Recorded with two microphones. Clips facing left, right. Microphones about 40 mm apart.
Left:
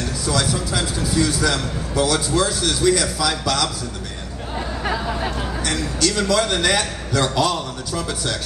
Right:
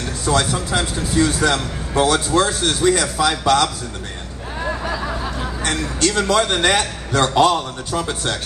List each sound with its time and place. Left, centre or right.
0.2 s a man's voice: right
5.9 s a man's voice: right